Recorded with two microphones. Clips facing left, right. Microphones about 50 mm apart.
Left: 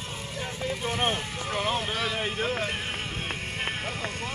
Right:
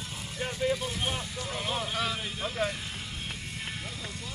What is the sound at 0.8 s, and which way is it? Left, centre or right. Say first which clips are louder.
Speech: left 5 dB; left.